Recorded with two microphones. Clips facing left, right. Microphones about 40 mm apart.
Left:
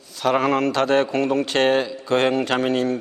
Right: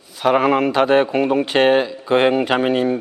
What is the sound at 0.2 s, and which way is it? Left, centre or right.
A man's voice, centre.